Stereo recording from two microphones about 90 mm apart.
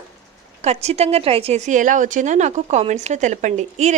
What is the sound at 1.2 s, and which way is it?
Speech, 90° right.